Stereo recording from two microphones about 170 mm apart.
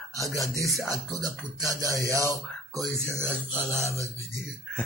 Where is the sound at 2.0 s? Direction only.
20° right (ahead or behind).